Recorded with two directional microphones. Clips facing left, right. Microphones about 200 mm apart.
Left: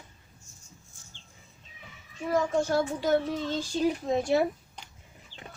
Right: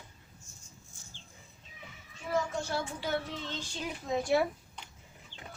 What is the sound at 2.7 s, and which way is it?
Speech, 45° left (ahead or behind).